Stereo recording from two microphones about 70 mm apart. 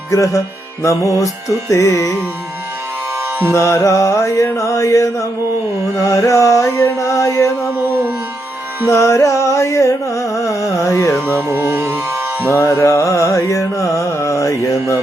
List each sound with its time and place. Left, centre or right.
0.8 s carnatic music: left
3.5 s carnatic music: left
8.9 s carnatic music: left
11.4 s music: right
12.5 s carnatic music: left